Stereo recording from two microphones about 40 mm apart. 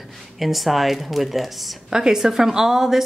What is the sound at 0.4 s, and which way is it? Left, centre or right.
Speech, centre.